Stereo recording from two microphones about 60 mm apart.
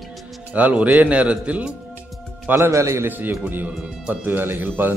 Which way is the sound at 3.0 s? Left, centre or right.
Right.